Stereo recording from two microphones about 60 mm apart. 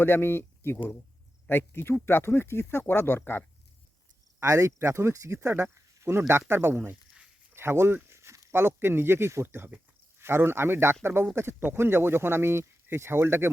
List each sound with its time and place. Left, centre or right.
0.0 s speech: left
4.4 s speech: right